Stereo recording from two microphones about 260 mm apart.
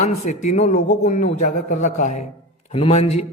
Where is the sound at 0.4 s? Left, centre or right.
Left.